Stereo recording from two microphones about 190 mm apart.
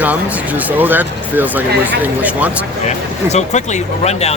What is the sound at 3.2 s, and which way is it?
Speech, 35° left (ahead or behind).